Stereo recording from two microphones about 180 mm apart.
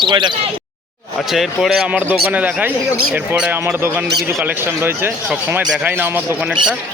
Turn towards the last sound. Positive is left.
turn(degrees=-10)  # may be behind; listen again after turning